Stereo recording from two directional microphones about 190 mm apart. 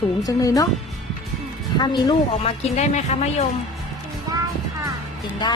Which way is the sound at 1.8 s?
20° left (ahead or behind).